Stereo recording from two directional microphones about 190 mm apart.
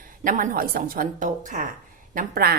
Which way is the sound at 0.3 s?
45° right (ahead or behind).